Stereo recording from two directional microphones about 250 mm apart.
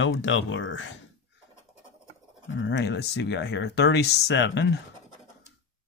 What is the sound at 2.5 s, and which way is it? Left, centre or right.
Speech, left.